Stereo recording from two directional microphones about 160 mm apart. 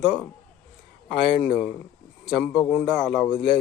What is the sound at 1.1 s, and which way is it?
A man's voice, 5° right (ahead or behind).